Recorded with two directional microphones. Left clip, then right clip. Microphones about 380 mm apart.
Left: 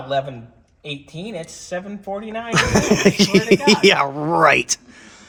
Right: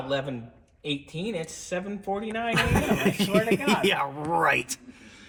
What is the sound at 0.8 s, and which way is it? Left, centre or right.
Speech, left.